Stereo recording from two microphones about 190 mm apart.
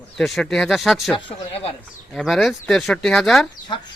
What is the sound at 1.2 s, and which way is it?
Speech, 30° left (ahead or behind).